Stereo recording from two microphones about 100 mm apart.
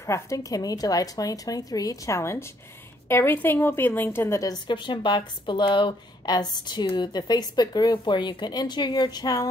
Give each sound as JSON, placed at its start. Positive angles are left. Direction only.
{"t": 0.0, "sound": "a woman's voice", "side_deg": 35}
{"t": 4.4, "sound": "speech", "side_deg": 45}